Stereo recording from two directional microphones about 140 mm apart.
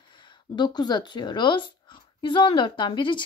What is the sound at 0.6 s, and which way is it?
A woman's voice, 30° left (ahead or behind).